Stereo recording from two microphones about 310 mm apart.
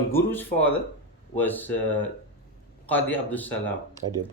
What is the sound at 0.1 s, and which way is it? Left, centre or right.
Speech, centre.